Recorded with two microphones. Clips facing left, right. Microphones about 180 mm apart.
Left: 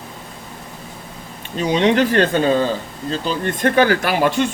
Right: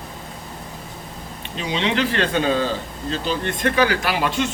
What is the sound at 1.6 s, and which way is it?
Speech, 45° left (ahead or behind).